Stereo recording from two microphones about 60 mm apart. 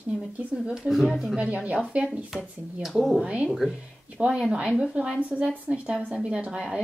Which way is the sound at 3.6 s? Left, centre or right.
Centre.